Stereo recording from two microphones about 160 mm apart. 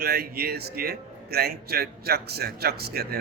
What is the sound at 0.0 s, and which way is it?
Speech, 75° right (ahead or behind).